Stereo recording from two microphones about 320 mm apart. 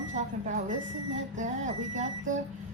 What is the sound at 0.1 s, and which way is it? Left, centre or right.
A woman's voice, right.